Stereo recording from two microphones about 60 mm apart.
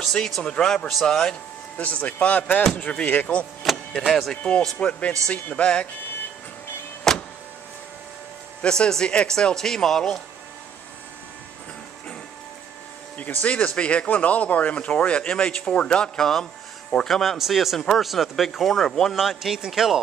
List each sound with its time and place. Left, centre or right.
0.4 s speech: centre
1.8 s speech: left
3.6 s vehicle: centre
4.1 s speech: centre
7.1 s vehicle: centre
8.6 s speech: centre
13.2 s speech: left; by 19.1 s centre
19.1 s speech: centre